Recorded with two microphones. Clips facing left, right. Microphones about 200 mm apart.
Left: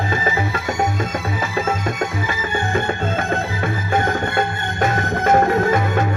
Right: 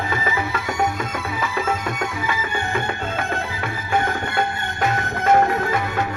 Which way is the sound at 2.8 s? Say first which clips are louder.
Left 5 dB; 45° left (ahead or behind).